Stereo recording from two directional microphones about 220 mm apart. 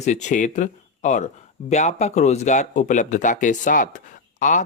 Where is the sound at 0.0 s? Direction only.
30° left (ahead or behind).